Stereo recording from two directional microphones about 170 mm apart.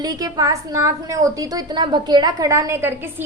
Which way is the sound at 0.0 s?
20° right (ahead or behind).